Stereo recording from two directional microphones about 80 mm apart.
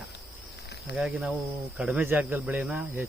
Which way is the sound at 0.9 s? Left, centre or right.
Centre.